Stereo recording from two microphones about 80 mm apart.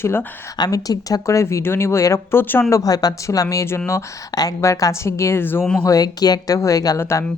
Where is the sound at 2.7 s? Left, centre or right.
Left.